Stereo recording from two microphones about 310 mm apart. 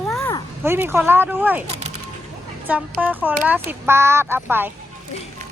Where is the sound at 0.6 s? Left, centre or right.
Centre.